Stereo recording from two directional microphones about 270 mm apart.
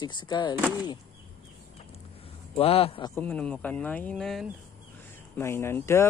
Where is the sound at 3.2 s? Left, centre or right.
Centre.